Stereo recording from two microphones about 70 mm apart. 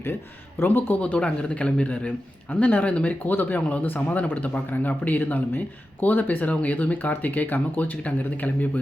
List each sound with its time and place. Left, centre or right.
0.6 s speech: left
1.0 s speech: centre